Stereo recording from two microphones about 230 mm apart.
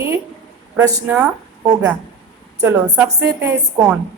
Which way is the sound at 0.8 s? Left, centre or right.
Centre.